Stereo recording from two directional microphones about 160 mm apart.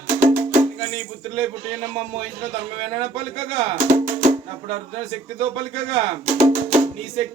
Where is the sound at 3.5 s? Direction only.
50° right (ahead or behind).